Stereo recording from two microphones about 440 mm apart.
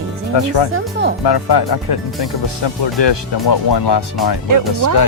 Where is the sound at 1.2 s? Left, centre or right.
Left.